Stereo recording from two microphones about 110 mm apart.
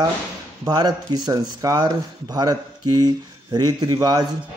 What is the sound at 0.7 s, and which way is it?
A man's voice, 35° right (ahead or behind).